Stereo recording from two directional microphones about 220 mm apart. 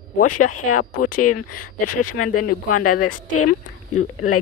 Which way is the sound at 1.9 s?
90° left.